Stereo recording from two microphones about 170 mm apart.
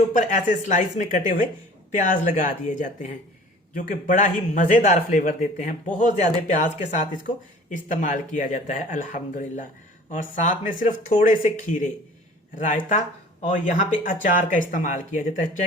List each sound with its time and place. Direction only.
0.7 s speech: 45° left (ahead or behind)